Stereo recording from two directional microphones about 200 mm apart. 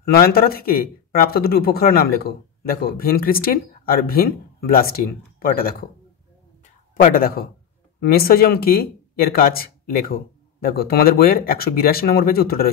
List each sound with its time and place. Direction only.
0.1 s speech: 50° left (ahead or behind)
6.6 s a sound: 45° left (ahead or behind)
8.0 s speech: 50° left (ahead or behind)